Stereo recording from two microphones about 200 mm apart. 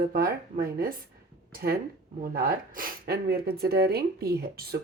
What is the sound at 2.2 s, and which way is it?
Speech, 50° right (ahead or behind).